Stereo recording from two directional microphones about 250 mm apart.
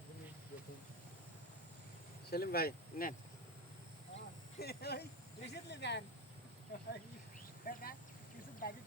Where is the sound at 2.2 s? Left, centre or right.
Left.